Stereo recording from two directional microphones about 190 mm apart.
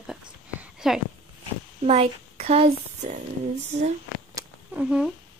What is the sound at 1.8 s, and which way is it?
Speech, 35° right (ahead or behind).